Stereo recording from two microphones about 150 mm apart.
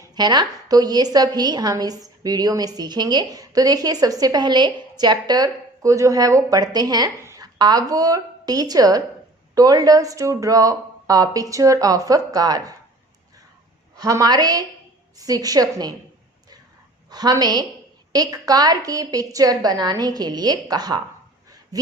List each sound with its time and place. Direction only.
0.0 s a woman's voice: 25° right (ahead or behind)
13.9 s a woman's voice: 25° right (ahead or behind)
17.1 s a woman's voice: 25° right (ahead or behind)
21.7 s a sound: 25° right (ahead or behind)